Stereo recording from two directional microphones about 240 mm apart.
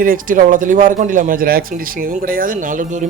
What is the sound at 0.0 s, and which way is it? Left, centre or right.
Speech, right.